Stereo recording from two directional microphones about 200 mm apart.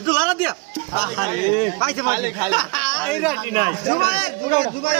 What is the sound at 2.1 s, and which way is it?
Speech, 15° right (ahead or behind).